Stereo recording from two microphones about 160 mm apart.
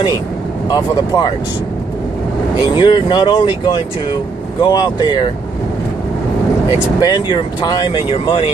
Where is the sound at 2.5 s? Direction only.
25° left (ahead or behind).